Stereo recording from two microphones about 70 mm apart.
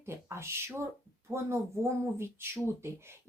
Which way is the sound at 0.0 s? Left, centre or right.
Right.